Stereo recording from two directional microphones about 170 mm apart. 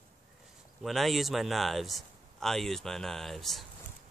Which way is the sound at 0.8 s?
Centre (ahead or behind).